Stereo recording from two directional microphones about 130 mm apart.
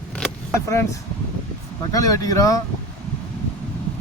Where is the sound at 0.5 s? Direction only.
20° left (ahead or behind).